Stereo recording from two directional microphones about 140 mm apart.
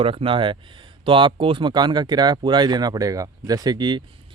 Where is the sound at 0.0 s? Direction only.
40° right (ahead or behind).